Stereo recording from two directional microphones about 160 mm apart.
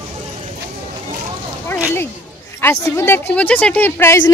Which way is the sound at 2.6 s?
15° left (ahead or behind).